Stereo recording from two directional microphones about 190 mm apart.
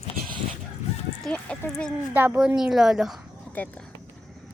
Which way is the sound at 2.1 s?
10° right (ahead or behind).